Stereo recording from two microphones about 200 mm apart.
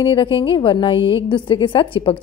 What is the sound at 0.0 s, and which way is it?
A woman's voice, 25° left (ahead or behind).